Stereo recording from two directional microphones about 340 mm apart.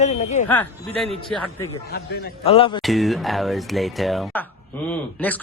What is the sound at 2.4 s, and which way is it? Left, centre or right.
Speech, centre.